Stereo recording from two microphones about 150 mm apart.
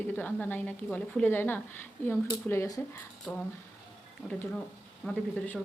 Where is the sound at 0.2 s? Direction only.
10° left (ahead or behind).